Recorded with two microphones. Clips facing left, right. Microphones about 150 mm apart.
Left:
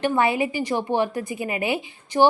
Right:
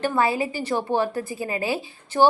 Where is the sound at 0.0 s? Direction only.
20° left (ahead or behind).